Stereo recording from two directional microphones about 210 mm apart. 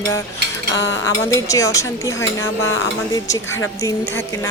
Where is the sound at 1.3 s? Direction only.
15° left (ahead or behind).